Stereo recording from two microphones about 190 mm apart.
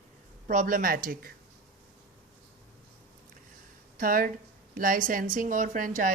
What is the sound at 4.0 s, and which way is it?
Speech, 45° right (ahead or behind).